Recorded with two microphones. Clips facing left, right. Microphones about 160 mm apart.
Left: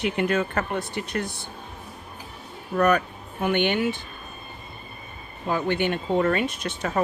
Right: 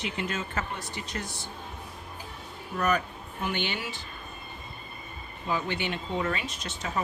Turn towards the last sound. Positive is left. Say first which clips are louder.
# left 6 dB
turn(degrees=60)  # may be behind; listen again after turning